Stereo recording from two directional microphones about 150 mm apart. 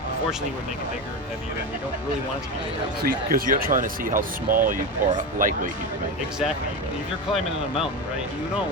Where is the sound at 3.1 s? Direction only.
70° right (ahead or behind).